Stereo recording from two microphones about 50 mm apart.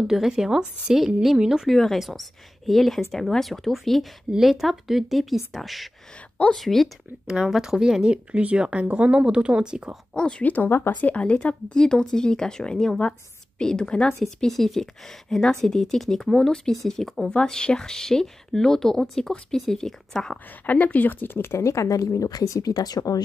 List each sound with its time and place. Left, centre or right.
0.0 s a woman's voice: centre
1.7 s a woman's voice: centre
7.2 s speech: centre
10.4 s a woman's voice: left
10.7 s speech: left
11.0 s speech: left
14.2 s speech: centre
17.3 s speech: centre
20.6 s speech: left